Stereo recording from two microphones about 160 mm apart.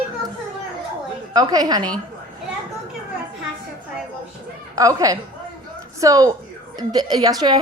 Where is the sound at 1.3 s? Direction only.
25° right (ahead or behind).